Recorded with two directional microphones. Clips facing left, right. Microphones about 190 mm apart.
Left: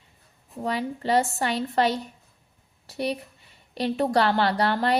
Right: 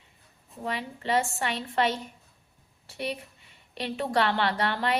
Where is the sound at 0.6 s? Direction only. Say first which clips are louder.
Left 5 dB; 40° left (ahead or behind).